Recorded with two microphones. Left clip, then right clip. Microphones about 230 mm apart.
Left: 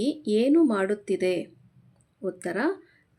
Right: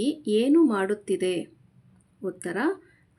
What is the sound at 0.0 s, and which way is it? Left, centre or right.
A woman's voice, centre.